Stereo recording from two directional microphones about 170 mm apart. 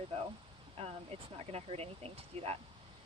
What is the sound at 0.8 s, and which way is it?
Speech, 35° right (ahead or behind).